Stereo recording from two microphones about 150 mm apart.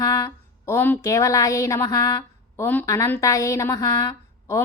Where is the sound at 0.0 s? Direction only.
20° left (ahead or behind).